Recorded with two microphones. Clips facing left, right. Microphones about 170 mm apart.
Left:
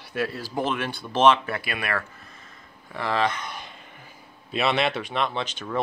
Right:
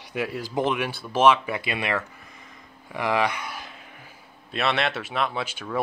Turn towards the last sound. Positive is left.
turn(degrees=-10)  # may be behind; listen again after turning